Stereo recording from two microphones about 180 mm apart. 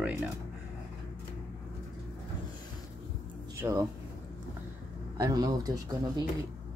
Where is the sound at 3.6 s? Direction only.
20° right (ahead or behind).